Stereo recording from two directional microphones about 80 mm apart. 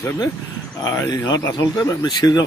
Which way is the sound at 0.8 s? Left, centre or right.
Left.